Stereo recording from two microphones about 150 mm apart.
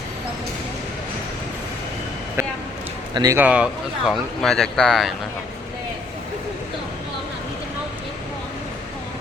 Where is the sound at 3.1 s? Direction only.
25° right (ahead or behind).